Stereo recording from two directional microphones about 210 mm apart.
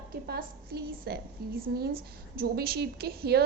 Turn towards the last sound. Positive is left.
turn(degrees=-50)  # may be behind; listen again after turning